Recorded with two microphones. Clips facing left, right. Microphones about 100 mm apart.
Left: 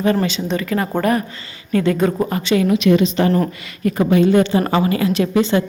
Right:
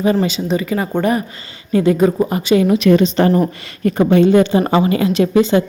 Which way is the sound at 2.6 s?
35° right (ahead or behind).